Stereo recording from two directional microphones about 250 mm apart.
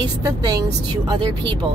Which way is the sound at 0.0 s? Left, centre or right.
Centre.